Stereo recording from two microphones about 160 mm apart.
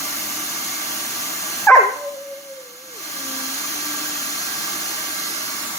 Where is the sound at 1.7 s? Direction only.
10° left (ahead or behind).